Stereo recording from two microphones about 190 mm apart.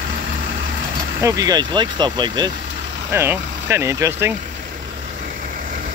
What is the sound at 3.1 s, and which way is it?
Speech, 10° right (ahead or behind).